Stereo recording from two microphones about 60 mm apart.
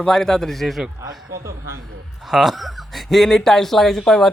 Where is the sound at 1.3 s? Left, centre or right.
Right.